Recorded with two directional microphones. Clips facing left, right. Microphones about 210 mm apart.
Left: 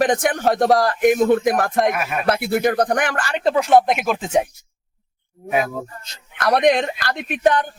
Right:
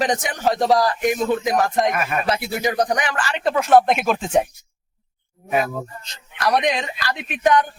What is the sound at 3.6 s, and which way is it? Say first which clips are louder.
Speech: right 2 dB; 15° left (ahead or behind).